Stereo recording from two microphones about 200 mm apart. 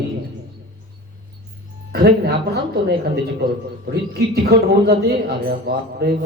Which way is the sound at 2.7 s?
55° right (ahead or behind).